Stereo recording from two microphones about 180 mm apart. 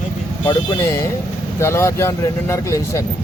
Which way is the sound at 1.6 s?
15° left (ahead or behind).